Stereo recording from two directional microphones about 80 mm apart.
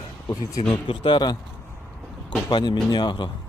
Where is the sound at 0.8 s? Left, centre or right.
Left.